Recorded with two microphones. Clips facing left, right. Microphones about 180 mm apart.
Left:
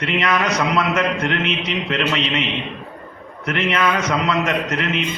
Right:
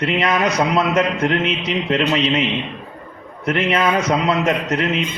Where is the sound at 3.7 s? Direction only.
30° right (ahead or behind).